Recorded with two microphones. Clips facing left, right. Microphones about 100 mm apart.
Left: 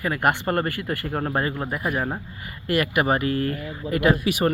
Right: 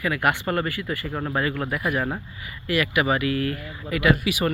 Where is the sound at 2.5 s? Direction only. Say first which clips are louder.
Left 1 dB; 45° left (ahead or behind).